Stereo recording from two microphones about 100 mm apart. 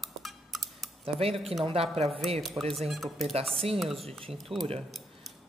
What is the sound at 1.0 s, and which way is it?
A woman's voice, 75° right (ahead or behind).